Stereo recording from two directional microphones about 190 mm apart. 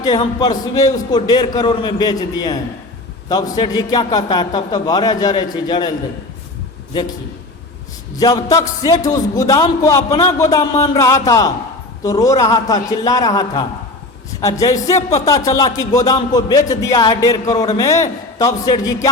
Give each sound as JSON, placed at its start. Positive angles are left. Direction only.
{"t": 0.3, "sound": "a man's voice", "side_deg": 20}
{"t": 8.1, "sound": "a man's voice", "side_deg": 20}
{"t": 10.8, "sound": "music", "side_deg": 15}
{"t": 12.0, "sound": "a man's voice", "side_deg": 20}
{"t": 14.4, "sound": "music", "side_deg": 15}
{"t": 15.3, "sound": "a man's voice", "side_deg": 20}